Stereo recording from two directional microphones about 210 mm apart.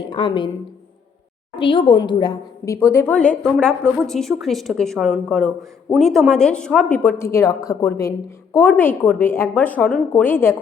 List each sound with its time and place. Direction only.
0.0 s a woman's voice: 25° left (ahead or behind)
1.5 s a woman's voice: 25° left (ahead or behind)